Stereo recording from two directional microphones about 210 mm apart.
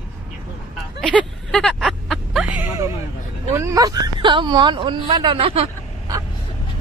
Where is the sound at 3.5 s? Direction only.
15° right (ahead or behind).